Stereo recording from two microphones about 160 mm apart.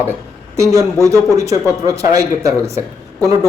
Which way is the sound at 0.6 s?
20° right (ahead or behind).